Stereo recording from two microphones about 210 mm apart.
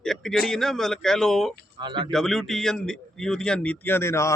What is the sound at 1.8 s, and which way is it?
Speech, 20° right (ahead or behind).